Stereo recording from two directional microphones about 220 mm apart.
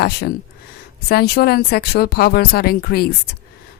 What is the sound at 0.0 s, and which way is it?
Speech, 45° left (ahead or behind).